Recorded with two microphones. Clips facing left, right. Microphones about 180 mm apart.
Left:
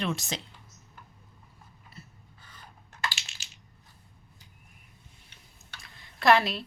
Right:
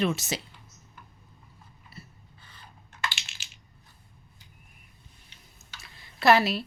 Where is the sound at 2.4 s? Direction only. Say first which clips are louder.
Left 1 dB; 45° left (ahead or behind).